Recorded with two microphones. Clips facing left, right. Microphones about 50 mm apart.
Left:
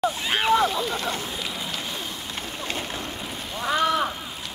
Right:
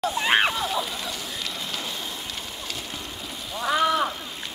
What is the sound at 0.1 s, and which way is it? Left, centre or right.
Slosh, right.